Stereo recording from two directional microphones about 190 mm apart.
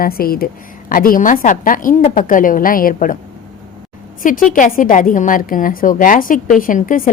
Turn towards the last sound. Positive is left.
turn(degrees=45)  # may be behind; listen again after turning